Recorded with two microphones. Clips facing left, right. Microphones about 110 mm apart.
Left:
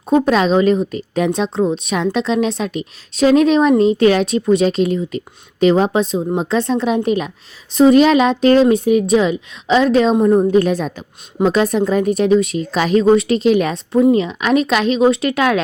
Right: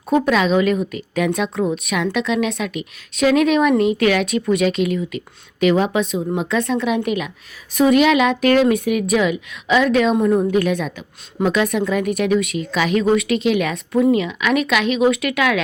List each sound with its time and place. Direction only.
0.1 s speech: 30° left (ahead or behind)